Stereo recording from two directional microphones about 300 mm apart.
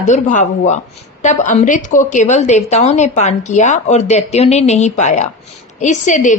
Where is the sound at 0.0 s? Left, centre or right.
Left.